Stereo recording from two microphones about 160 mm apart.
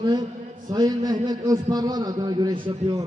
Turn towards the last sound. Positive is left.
turn(degrees=-30)  # may be behind; listen again after turning